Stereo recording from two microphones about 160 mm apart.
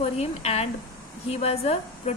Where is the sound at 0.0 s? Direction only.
40° left (ahead or behind).